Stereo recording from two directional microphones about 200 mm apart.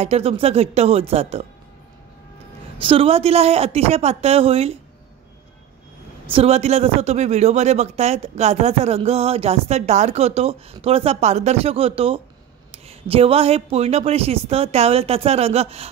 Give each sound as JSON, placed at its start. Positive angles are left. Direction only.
{"t": 0.0, "sound": "a man's voice", "side_deg": -30}
{"t": 2.8, "sound": "a man's voice", "side_deg": -30}
{"t": 6.2, "sound": "a man's voice", "side_deg": -30}